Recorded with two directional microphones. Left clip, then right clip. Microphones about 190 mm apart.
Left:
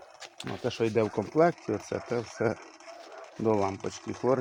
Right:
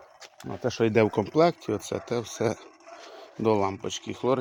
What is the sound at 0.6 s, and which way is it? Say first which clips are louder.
Speech: right 5 dB; 60° right (ahead or behind).